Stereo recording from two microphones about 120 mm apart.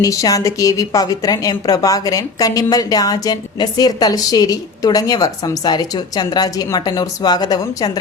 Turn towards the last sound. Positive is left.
turn(degrees=35)  # may be behind; listen again after turning